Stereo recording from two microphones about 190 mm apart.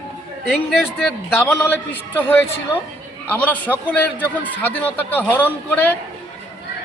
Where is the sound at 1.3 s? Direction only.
10° left (ahead or behind).